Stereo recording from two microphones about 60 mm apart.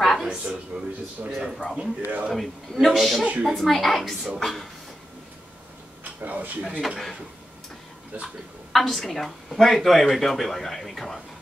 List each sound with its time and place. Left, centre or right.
0.0 s a sound: centre
1.3 s speech: centre
2.0 s a man's voice: right
2.3 s speech: centre
6.2 s speech: right
8.7 s speech: centre